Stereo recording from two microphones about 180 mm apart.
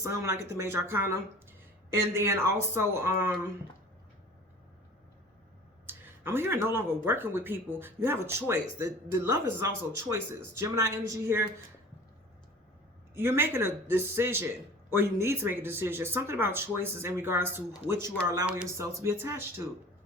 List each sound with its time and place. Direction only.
0.0 s speech: 15° right (ahead or behind)
5.8 s speech: 10° right (ahead or behind)
13.1 s speech: 15° right (ahead or behind)